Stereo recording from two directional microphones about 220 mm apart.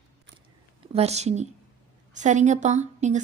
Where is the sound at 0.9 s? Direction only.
30° right (ahead or behind).